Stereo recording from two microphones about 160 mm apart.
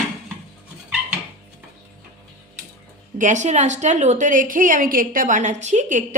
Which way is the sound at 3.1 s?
50° right (ahead or behind).